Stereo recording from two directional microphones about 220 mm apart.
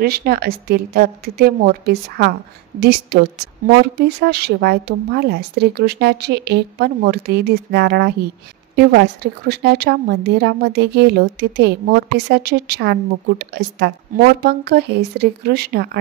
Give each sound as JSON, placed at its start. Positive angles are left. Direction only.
{"t": 0.0, "sound": "speech", "side_deg": -45}